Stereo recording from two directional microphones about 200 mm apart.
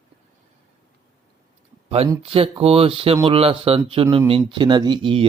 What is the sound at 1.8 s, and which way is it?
Speech, 30° right (ahead or behind).